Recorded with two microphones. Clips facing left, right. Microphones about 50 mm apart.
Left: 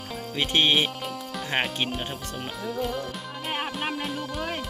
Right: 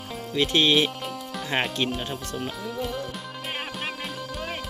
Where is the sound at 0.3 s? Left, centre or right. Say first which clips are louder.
Right 2 dB; left.